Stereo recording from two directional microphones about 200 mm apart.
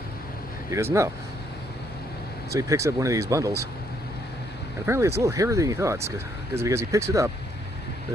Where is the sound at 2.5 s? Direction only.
15° right (ahead or behind).